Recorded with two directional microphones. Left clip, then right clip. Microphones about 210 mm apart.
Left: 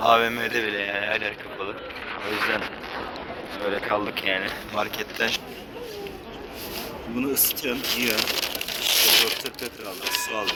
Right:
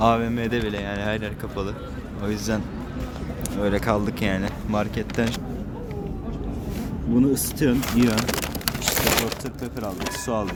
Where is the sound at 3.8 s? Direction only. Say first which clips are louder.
Even; 5° right (ahead or behind).